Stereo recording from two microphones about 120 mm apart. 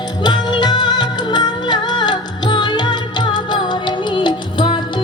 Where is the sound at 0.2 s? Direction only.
40° left (ahead or behind).